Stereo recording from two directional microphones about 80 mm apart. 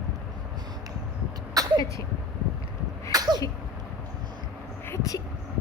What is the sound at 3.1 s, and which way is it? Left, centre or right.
Sneeze, right.